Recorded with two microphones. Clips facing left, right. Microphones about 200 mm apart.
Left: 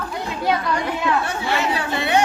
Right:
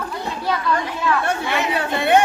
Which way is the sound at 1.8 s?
55° right (ahead or behind).